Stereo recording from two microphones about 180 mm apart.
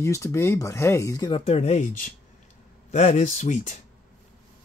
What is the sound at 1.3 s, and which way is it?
Speech, 35° left (ahead or behind).